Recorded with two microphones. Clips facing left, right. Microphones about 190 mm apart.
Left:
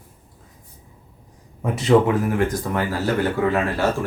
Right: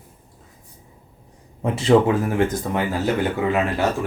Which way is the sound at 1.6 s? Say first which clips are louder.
Even; 30° right (ahead or behind).